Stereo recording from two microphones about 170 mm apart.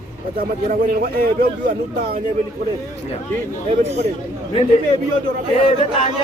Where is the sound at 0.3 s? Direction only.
55° right (ahead or behind).